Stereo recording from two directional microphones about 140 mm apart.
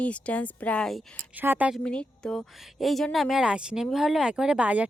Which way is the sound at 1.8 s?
5° left (ahead or behind).